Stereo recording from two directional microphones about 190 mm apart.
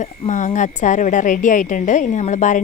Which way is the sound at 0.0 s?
40° left (ahead or behind).